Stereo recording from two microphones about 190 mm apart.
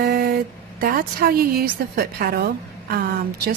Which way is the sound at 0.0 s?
55° right (ahead or behind).